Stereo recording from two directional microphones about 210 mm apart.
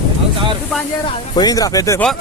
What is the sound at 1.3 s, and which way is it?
Speech, 20° left (ahead or behind).